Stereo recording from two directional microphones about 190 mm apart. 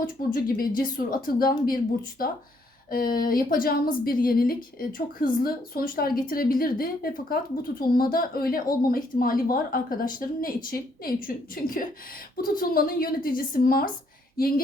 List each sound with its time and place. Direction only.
0.0 s a woman's voice: 45° left (ahead or behind)